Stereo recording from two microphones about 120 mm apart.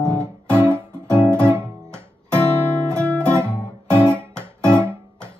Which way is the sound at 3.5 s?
20° right (ahead or behind).